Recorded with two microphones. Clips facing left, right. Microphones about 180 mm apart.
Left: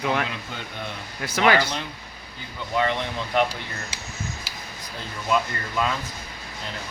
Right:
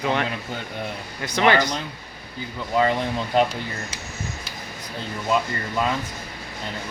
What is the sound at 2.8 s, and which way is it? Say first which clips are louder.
Speech: right 4 dB; 35° right (ahead or behind).